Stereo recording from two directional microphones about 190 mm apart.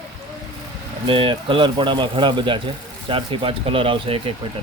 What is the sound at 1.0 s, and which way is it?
Speech, 25° right (ahead or behind).